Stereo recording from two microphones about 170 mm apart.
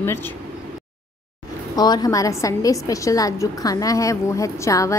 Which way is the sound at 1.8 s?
25° left (ahead or behind).